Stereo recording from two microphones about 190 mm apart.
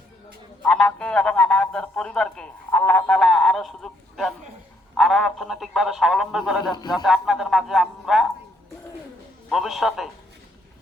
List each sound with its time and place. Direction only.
0.6 s a man's voice: 5° left (ahead or behind)
6.7 s a man's voice: 20° left (ahead or behind)
7.0 s a man's voice: centre (ahead or behind)
9.5 s speech: centre (ahead or behind)